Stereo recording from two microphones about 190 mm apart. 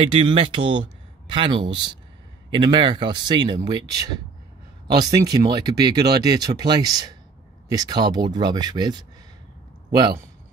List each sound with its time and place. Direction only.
0.0 s a man's voice: 30° right (ahead or behind)